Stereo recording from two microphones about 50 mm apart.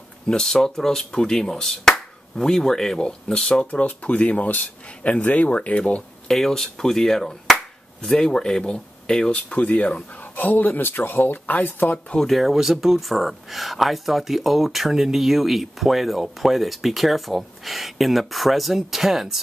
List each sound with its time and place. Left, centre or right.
0.3 s speech: centre; by 6.0 s left
6.2 s speech: centre
9.6 s speech: left
10.3 s speech: left
12.3 s speech: centre